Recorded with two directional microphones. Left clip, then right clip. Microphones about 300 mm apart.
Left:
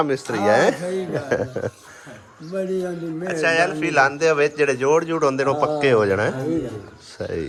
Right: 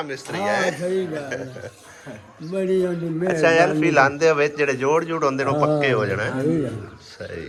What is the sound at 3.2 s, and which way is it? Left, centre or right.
Speech, centre.